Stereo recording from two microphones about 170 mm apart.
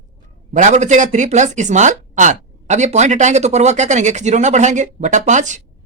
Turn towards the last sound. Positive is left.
turn(degrees=-45)  # may be behind; listen again after turning